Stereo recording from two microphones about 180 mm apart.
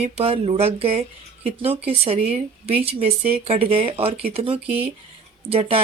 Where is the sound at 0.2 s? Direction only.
35° right (ahead or behind).